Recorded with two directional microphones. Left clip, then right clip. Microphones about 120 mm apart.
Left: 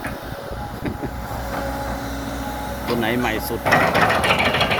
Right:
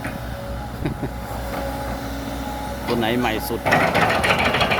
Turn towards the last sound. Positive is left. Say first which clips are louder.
# even
turn(degrees=0)  # may be behind; listen again after turning